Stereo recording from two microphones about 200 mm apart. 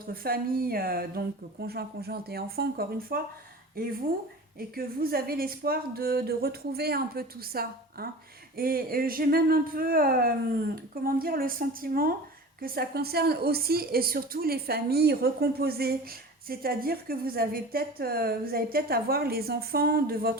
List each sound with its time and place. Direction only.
0.1 s a woman's voice: 50° right (ahead or behind)
4.7 s a woman's voice: 50° right (ahead or behind)